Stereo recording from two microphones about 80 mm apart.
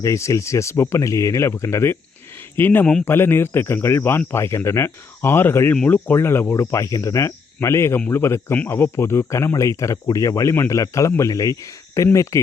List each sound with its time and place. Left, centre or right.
0.0 s speech: left
5.7 s speech: centre
6.1 s speech: left